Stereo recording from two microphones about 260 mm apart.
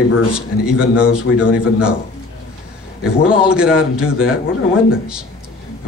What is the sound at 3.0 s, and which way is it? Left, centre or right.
A man's voice, centre.